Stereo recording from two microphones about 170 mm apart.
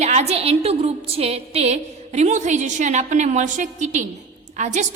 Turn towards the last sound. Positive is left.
turn(degrees=-45)  # may be behind; listen again after turning